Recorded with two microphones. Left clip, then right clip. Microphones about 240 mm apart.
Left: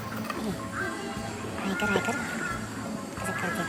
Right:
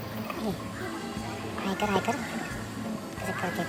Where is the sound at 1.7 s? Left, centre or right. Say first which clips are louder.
Left 1 dB; centre.